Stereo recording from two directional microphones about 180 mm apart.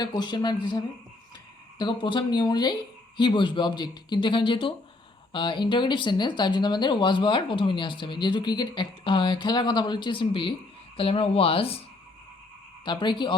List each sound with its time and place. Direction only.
0.0 s speech: 25° left (ahead or behind)
12.8 s speech: 25° left (ahead or behind)